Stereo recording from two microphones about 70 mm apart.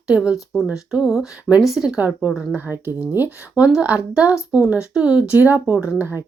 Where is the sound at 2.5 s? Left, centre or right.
Right; by 5.2 s centre.